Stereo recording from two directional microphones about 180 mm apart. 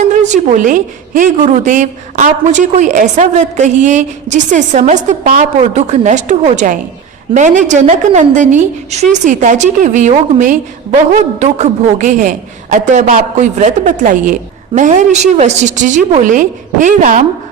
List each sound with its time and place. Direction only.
0.0 s a woman's voice: 45° right (ahead or behind)